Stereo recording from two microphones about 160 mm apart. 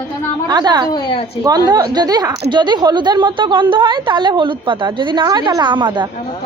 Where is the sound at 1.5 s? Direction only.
25° right (ahead or behind).